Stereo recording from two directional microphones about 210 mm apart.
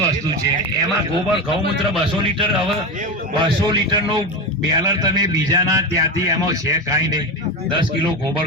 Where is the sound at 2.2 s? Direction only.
25° right (ahead or behind).